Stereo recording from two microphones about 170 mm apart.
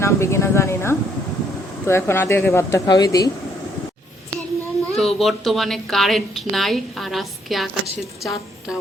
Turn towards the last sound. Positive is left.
turn(degrees=0)  # may be behind; listen again after turning